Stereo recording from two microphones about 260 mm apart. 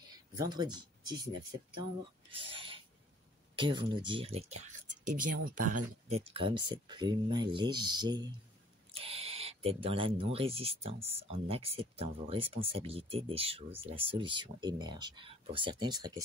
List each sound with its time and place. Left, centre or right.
0.4 s speech: centre
2.3 s a sound: centre
3.5 s speech: centre